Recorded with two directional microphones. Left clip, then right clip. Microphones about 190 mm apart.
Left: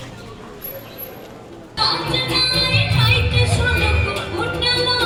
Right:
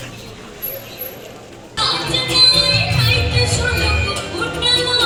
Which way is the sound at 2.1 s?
5° right (ahead or behind).